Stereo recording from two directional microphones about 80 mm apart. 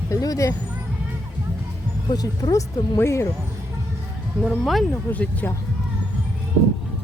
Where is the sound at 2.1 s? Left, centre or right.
Left.